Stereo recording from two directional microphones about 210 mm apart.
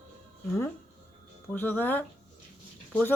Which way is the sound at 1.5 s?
10° left (ahead or behind).